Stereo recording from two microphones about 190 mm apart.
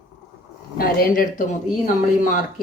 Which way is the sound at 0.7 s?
50° left (ahead or behind).